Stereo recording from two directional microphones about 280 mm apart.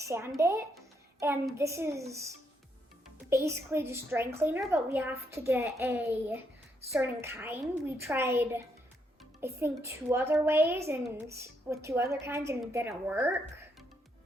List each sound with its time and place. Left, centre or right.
0.0 s a child's voice: centre